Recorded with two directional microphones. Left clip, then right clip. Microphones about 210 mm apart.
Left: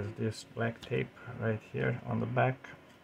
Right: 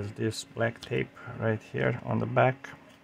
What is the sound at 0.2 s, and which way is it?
Speech, 30° right (ahead or behind).